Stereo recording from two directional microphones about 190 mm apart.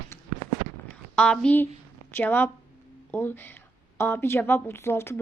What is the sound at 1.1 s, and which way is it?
A woman's voice, 5° left (ahead or behind).